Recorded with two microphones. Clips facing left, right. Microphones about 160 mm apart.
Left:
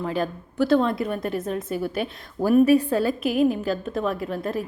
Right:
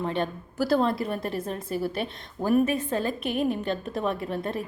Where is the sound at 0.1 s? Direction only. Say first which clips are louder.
Left 2 dB; centre (ahead or behind).